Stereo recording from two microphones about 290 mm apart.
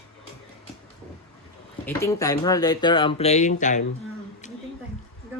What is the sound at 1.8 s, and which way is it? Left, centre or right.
Speech, centre.